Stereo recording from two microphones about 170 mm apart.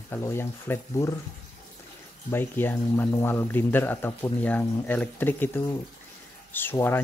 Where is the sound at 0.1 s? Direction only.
15° left (ahead or behind).